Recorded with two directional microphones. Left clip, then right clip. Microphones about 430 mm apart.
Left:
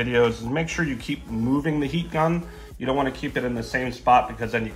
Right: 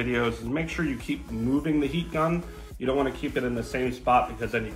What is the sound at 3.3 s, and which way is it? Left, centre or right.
Speech, left.